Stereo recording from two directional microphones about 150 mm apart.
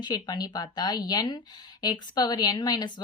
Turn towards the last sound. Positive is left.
turn(degrees=25)  # may be behind; listen again after turning